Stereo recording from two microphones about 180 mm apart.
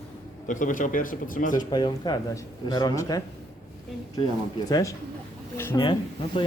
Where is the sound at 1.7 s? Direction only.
25° left (ahead or behind).